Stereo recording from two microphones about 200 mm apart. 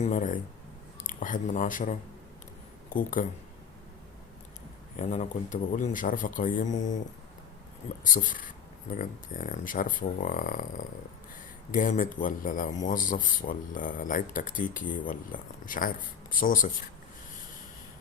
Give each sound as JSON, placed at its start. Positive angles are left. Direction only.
{"t": 0.0, "sound": "speech", "side_deg": 40}
{"t": 4.9, "sound": "speech", "side_deg": 35}
{"t": 8.0, "sound": "speech", "side_deg": 40}